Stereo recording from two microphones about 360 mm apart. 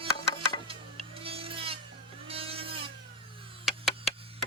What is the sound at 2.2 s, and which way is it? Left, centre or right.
Vehicle, centre.